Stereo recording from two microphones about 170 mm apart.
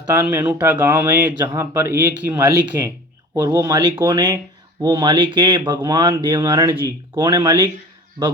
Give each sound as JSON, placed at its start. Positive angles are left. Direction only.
{"t": 0.1, "sound": "speech", "side_deg": -10}